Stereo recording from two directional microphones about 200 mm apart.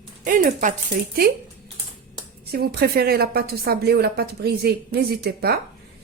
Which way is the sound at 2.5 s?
50° right (ahead or behind).